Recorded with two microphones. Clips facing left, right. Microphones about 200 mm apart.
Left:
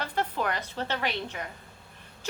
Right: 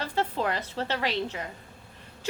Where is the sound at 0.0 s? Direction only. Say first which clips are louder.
Right 2 dB; 25° right (ahead or behind).